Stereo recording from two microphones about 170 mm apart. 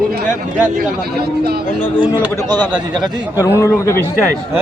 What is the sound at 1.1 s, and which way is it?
Speech, 65° right (ahead or behind).